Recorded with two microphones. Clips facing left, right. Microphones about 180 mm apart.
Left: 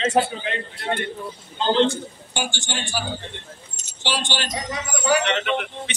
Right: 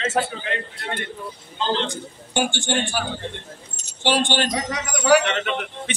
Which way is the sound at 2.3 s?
55° right (ahead or behind).